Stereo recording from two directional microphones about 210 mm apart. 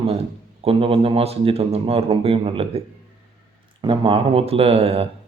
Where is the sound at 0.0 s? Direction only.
25° right (ahead or behind).